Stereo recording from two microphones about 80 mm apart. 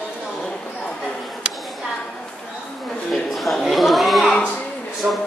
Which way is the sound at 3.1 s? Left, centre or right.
Centre.